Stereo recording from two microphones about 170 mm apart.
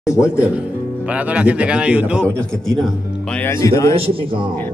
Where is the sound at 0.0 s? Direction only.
15° left (ahead or behind).